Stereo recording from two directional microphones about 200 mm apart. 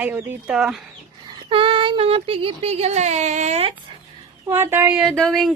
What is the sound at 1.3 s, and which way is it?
Speech, 25° right (ahead or behind).